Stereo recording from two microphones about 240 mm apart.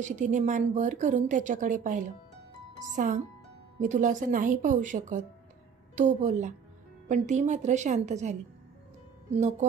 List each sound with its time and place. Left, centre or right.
0.0 s a woman's voice: right